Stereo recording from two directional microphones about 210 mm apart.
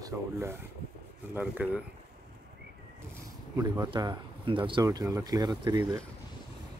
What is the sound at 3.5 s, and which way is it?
Speech, 15° right (ahead or behind).